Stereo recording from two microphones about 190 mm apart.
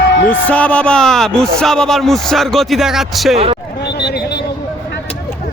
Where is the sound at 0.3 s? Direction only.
5° left (ahead or behind).